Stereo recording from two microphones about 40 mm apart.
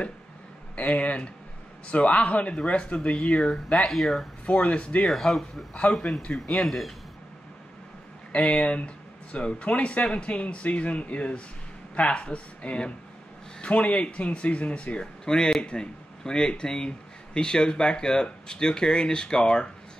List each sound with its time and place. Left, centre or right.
0.7 s speech: left; by 3.9 s centre
3.9 s speech: centre
4.5 s speech: left
5.0 s speech: centre
5.9 s speech: left
6.6 s speech: centre
8.3 s speech: left
15.0 s speech: centre